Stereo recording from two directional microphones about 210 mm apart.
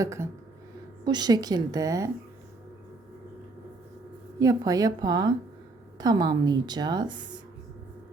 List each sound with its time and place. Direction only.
0.0 s a woman's voice: 15° right (ahead or behind)
4.4 s a woman's voice: 15° right (ahead or behind)